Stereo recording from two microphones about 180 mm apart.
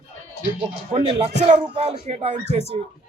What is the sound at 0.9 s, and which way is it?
A man's voice, 30° right (ahead or behind).